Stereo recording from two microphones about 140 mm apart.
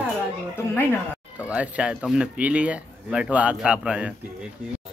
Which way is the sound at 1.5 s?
10° right (ahead or behind).